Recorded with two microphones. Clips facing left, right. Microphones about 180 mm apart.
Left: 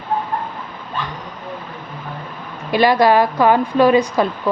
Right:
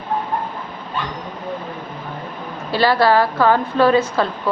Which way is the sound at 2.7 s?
15° left (ahead or behind).